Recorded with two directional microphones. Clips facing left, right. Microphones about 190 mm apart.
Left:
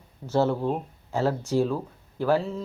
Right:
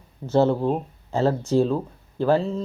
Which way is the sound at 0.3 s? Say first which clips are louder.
Right 4 dB; 20° right (ahead or behind).